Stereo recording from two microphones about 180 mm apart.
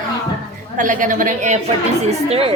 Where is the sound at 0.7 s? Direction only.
45° right (ahead or behind).